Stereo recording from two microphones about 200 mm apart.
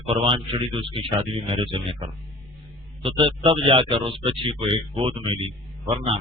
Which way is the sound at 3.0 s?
25° right (ahead or behind).